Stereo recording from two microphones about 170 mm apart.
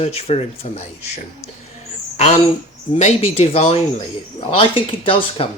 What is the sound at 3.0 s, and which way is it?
Speech, 40° left (ahead or behind).